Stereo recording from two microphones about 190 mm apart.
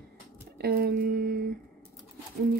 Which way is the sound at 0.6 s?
55° right (ahead or behind).